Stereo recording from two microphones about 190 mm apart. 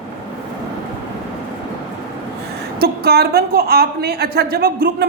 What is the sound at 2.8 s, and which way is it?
A woman's voice, 55° right (ahead or behind).